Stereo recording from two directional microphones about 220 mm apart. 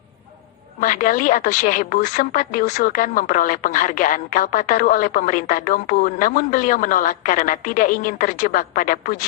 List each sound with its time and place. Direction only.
0.8 s a woman's voice: 35° left (ahead or behind)